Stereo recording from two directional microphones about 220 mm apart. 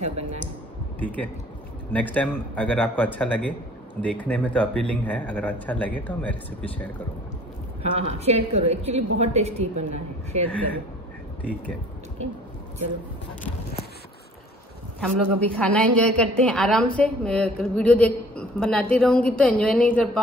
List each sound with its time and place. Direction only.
0.0 s a woman's voice: 30° right (ahead or behind)
0.9 s speech: 5° left (ahead or behind)
7.8 s a woman's voice: 30° right (ahead or behind)
15.0 s a woman's voice: 5° left (ahead or behind)